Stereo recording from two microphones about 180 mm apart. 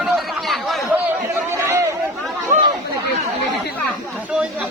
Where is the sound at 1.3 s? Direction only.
15° right (ahead or behind).